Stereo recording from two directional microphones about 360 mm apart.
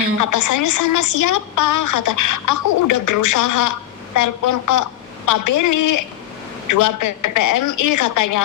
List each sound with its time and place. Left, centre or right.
0.2 s a woman's voice: left